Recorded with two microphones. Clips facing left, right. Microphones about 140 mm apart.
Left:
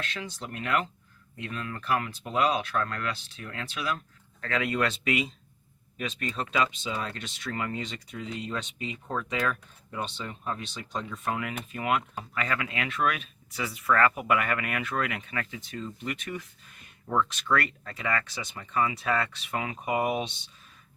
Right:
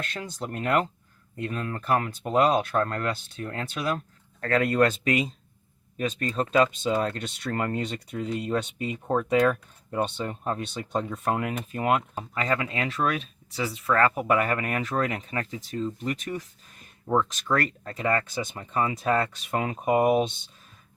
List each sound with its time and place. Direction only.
0.0 s speech: 45° right (ahead or behind)